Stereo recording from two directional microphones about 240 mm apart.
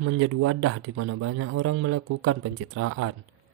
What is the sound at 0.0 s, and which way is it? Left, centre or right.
A man's voice, right.